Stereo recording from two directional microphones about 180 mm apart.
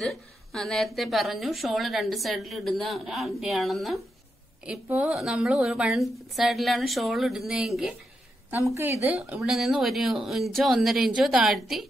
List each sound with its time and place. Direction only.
0.0 s a woman's voice: centre (ahead or behind)
8.5 s a woman's voice: 15° right (ahead or behind)